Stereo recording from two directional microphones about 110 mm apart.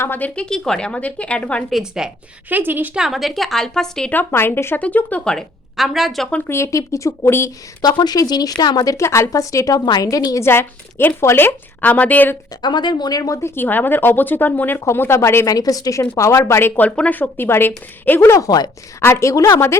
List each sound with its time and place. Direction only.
0.0 s a woman's voice: 15° left (ahead or behind)
1.7 s a woman's voice: 5° right (ahead or behind)
2.5 s a woman's voice: 15° right (ahead or behind)
3.0 s a woman's voice: centre (ahead or behind)
4.1 s a woman's voice: 20° left (ahead or behind); by 6.2 s centre (ahead or behind)
6.5 s speech: 25° left (ahead or behind)
7.8 s speech: 40° left (ahead or behind)
10.4 s a woman's voice: 20° left (ahead or behind)
12.6 s speech: 40° left (ahead or behind); by 18.3 s 20° left (ahead or behind)
18.3 s speech: 35° left (ahead or behind)